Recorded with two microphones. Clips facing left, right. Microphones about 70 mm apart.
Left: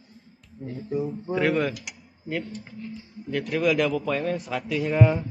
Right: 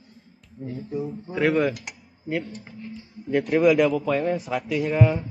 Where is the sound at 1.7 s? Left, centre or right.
Right.